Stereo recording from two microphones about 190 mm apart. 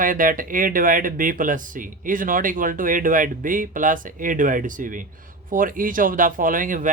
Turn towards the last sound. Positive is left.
turn(degrees=-45)  # may be behind; listen again after turning